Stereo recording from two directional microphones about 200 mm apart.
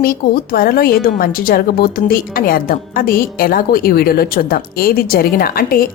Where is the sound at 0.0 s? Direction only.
45° left (ahead or behind).